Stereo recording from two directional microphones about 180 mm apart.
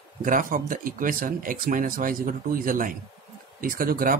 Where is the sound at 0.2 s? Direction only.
50° right (ahead or behind).